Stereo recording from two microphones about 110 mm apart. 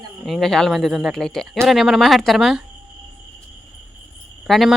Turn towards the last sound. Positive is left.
turn(degrees=0)  # may be behind; listen again after turning